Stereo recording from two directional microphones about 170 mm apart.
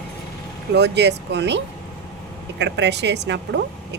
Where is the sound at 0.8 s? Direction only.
90° right.